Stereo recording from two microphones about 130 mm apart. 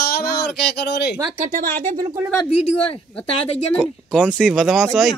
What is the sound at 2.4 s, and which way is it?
Speech, 50° left (ahead or behind).